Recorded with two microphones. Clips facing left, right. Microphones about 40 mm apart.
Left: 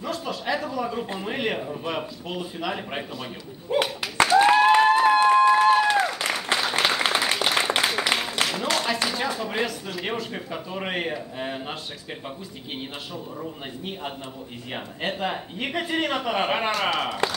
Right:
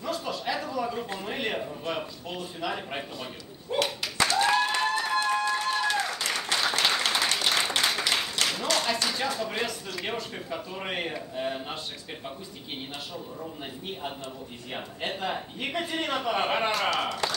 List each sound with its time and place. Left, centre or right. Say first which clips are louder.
0.0 s a sound: left 2 dB; centre
1.0 s speech: left 4 dB; centre
4.2 s applause: left 7 dB; left
7.2 s a sound: left 3 dB; centre
8.4 s a sound: left 2 dB; left
8.7 s tap: left 1 dB; centre
9.1 s speech: left 3 dB; centre
10.3 s speech: left 3 dB; centre
13.4 s speech: left 3 dB; centre